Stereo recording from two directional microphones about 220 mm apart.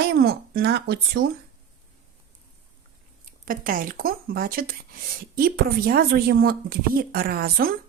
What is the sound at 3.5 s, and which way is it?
Speech, 40° right (ahead or behind).